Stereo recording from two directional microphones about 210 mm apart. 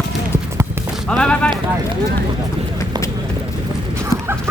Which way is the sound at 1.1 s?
5° left (ahead or behind).